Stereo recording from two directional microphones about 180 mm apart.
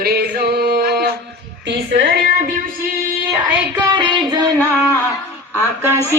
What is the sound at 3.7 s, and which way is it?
Music, 20° right (ahead or behind).